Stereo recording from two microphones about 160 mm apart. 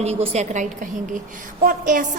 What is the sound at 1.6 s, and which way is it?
Speech, 55° right (ahead or behind).